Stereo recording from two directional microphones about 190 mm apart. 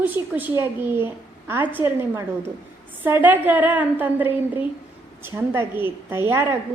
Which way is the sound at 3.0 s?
10° right (ahead or behind).